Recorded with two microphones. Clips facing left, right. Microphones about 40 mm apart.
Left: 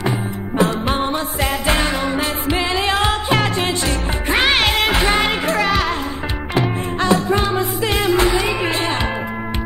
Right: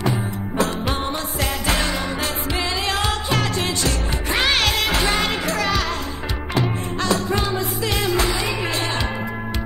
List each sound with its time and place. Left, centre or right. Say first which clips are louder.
0.6 s music: left 5 dB; left